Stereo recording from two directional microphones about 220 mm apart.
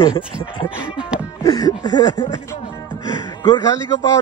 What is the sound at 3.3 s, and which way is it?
Speech, 20° left (ahead or behind).